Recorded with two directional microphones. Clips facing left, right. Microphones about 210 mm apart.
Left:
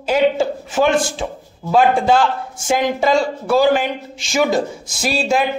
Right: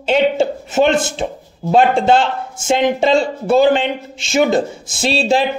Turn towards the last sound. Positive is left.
turn(degrees=-30)  # may be behind; listen again after turning